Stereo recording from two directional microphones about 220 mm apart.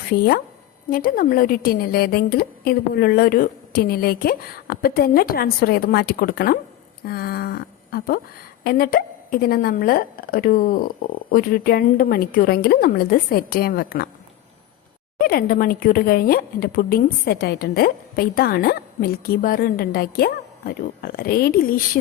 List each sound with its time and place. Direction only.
0.1 s a woman's voice: 45° left (ahead or behind)
15.2 s speech: 45° left (ahead or behind)